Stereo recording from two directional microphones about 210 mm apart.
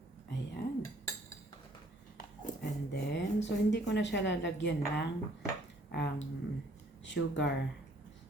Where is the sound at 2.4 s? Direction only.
55° left (ahead or behind).